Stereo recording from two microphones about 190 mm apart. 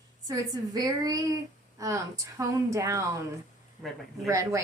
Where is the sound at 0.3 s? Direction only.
20° right (ahead or behind).